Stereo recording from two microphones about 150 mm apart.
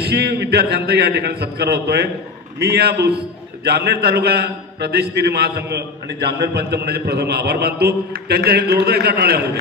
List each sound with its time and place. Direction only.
0.0 s a man's voice: 90° right